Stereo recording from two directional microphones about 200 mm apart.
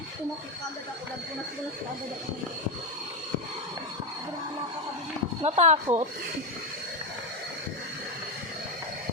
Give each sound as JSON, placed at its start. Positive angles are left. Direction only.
{"t": 5.4, "sound": "speech", "side_deg": -35}